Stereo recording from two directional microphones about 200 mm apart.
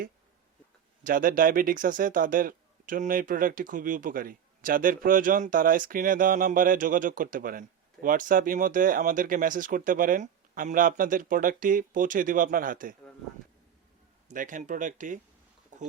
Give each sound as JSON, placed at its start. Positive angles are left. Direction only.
{"t": 1.0, "sound": "speech", "side_deg": -45}
{"t": 14.3, "sound": "speech", "side_deg": -40}
{"t": 15.7, "sound": "a sound", "side_deg": -40}